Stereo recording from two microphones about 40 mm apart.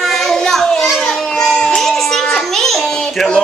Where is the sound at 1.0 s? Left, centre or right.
Centre.